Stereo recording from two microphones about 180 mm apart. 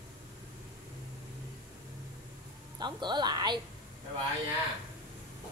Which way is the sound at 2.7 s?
25° right (ahead or behind).